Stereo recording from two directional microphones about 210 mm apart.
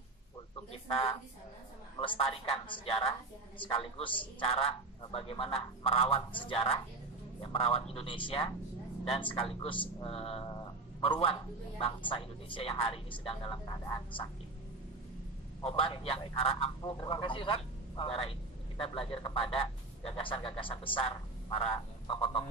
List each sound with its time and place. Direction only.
2.0 s speech: 25° left (ahead or behind)
15.6 s speech: 25° left (ahead or behind)